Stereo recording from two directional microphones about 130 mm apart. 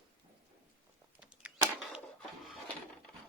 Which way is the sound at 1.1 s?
10° right (ahead or behind).